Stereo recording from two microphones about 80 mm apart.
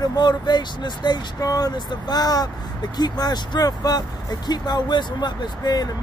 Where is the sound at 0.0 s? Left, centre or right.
Left.